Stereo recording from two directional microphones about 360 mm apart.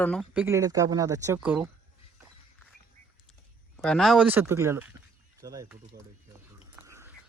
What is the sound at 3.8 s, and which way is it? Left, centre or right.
Speech, centre.